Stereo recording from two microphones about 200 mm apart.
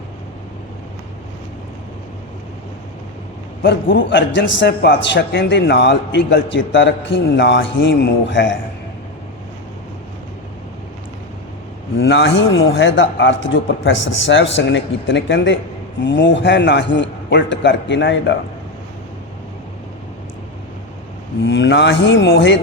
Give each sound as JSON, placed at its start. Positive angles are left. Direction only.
{"t": 4.1, "sound": "a man's voice", "side_deg": 65}
{"t": 11.9, "sound": "a man's voice", "side_deg": 65}
{"t": 21.4, "sound": "a man's voice", "side_deg": 65}